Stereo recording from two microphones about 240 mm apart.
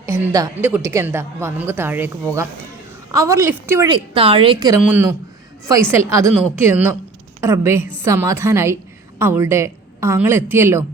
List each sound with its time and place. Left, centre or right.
0.0 s a woman's voice: centre
3.9 s a woman's voice: right
4.9 s a woman's voice: centre